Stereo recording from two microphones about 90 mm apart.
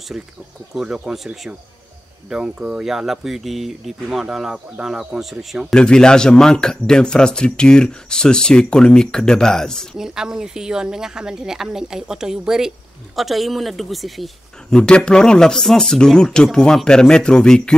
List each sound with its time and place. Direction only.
0.7 s speech: 10° right (ahead or behind)
5.8 s a man's voice: 10° left (ahead or behind)
9.9 s a man's voice: 5° right (ahead or behind); by 17.7 s 10° left (ahead or behind)